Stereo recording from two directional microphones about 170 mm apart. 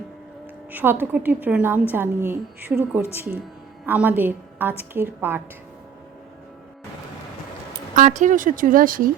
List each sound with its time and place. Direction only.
0.7 s a woman's voice: 10° right (ahead or behind)
7.9 s speech: 45° right (ahead or behind)